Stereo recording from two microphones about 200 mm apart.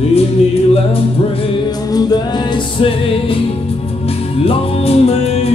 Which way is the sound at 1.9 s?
20° left (ahead or behind).